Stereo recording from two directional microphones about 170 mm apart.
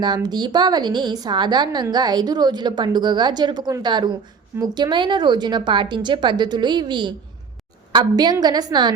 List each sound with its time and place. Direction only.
0.0 s a woman's voice: 25° right (ahead or behind)